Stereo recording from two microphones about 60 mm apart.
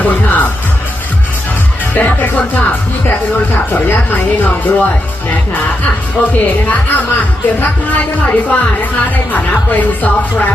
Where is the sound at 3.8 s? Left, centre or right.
Left.